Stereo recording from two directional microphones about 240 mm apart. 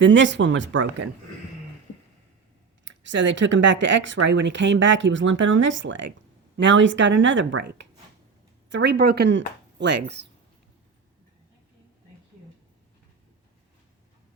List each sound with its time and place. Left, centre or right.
0.0 s speech: right
2.8 s speech: right